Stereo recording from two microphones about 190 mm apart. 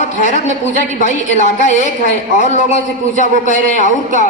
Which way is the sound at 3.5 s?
40° left (ahead or behind).